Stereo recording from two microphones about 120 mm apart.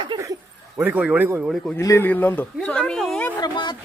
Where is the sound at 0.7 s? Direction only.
15° right (ahead or behind).